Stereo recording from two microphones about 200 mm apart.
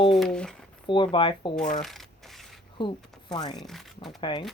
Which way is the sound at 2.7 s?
20° left (ahead or behind).